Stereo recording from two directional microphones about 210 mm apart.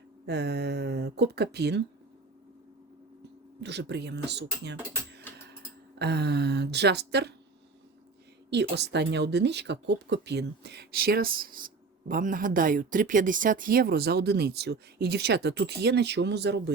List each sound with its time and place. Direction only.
0.3 s a woman's voice: 50° right (ahead or behind)
3.6 s a woman's voice: 55° right (ahead or behind)
8.4 s a woman's voice: 55° right (ahead or behind)